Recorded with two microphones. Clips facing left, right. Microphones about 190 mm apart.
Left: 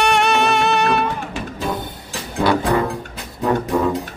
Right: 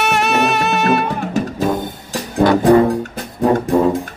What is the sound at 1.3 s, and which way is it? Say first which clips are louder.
Music: right 7 dB; 40° right (ahead or behind).